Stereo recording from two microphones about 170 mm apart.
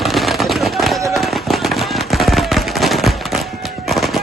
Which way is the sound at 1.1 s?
Centre (ahead or behind).